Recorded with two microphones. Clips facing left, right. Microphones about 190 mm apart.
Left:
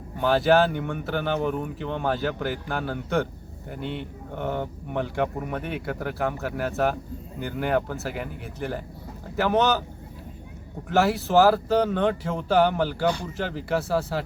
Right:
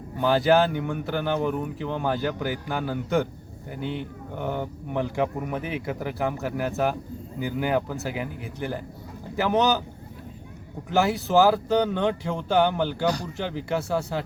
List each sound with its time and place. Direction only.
0.2 s speech: centre (ahead or behind)
10.8 s speech: centre (ahead or behind)